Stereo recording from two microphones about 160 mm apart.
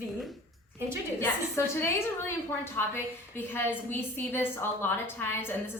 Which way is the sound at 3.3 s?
15° left (ahead or behind).